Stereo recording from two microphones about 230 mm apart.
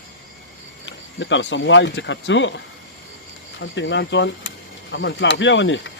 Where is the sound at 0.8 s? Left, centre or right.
Left.